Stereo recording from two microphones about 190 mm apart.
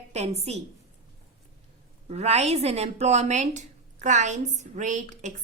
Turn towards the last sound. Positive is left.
turn(degrees=-40)  # may be behind; listen again after turning